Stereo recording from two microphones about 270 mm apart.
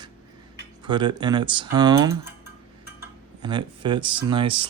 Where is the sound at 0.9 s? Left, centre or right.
Centre.